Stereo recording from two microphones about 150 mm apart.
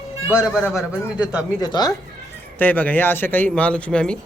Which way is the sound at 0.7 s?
5° right (ahead or behind).